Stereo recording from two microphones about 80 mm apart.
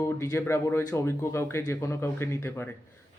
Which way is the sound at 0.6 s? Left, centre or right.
Left.